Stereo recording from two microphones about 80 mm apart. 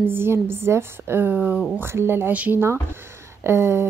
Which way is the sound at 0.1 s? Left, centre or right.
Right.